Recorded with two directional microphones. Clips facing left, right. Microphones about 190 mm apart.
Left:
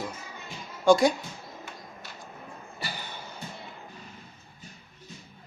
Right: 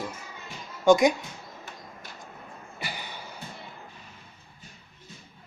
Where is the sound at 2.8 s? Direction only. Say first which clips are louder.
Right 1 dB; 15° right (ahead or behind).